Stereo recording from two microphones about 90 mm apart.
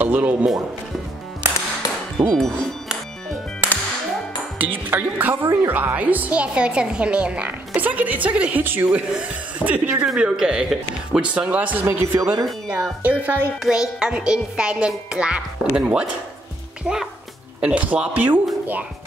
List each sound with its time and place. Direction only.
0.0 s a woman's voice: 20° right (ahead or behind)
2.2 s speech: 60° right (ahead or behind)
4.6 s a woman's voice: 20° right (ahead or behind)
13.6 s a woman's voice: 5° right (ahead or behind)